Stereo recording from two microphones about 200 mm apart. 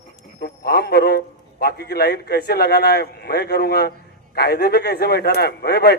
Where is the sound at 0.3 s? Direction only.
55° left (ahead or behind).